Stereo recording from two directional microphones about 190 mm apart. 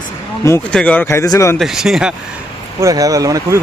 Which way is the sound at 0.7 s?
5° left (ahead or behind).